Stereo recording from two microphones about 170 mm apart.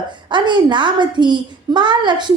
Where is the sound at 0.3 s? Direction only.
25° right (ahead or behind).